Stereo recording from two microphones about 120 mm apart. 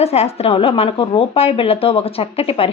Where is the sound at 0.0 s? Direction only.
60° left (ahead or behind).